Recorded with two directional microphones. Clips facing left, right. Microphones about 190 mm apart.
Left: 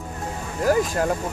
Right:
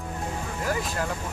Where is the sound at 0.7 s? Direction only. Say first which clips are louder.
Left 9 dB; 45° left (ahead or behind).